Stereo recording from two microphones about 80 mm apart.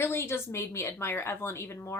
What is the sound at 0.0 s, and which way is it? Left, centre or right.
A woman's voice, left.